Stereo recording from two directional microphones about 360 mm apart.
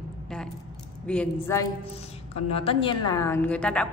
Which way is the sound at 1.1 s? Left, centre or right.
Centre.